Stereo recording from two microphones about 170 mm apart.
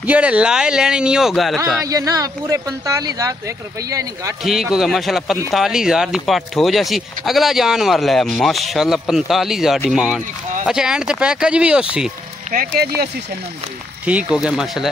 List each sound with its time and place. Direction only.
0.0 s speech: 10° right (ahead or behind)
1.9 s speech: 20° right (ahead or behind)
4.4 s speech: centre (ahead or behind)
12.4 s speech: 60° right (ahead or behind)
14.0 s speech: 5° right (ahead or behind)